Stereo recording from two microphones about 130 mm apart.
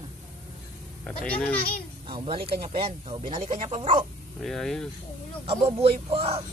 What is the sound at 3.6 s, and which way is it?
Speech, 45° right (ahead or behind).